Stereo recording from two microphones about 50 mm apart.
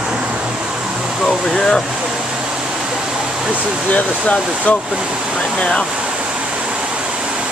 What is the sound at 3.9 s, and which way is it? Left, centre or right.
Speech, left.